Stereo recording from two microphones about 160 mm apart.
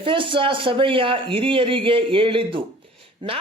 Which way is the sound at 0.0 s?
30° right (ahead or behind).